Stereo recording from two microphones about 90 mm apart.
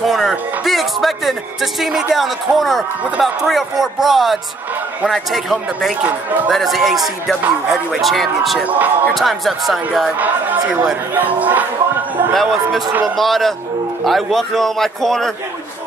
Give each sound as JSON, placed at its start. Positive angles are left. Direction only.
{"t": 0.0, "sound": "a man's voice", "side_deg": -5}
{"t": 6.0, "sound": "speech", "side_deg": -15}
{"t": 6.5, "sound": "a man's voice", "side_deg": 0}
{"t": 8.6, "sound": "speech", "side_deg": -20}
{"t": 9.1, "sound": "a man's voice", "side_deg": 0}
{"t": 10.1, "sound": "speech", "side_deg": -20}
{"t": 13.0, "sound": "a man's voice", "side_deg": 0}